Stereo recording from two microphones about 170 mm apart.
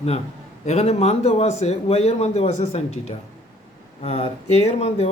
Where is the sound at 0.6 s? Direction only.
40° left (ahead or behind).